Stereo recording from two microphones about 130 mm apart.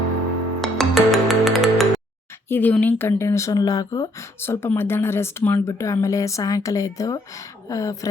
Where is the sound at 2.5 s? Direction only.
15° left (ahead or behind).